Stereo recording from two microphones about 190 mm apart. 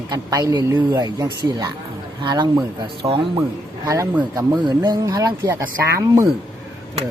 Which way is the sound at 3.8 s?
15° right (ahead or behind).